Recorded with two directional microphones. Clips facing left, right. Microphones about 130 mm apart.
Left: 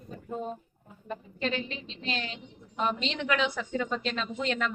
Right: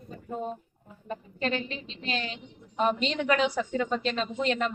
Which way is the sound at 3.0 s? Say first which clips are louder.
Right 3 dB; 40° right (ahead or behind).